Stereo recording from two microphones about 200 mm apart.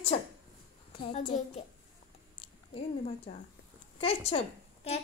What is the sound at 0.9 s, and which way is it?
Speech, 30° left (ahead or behind).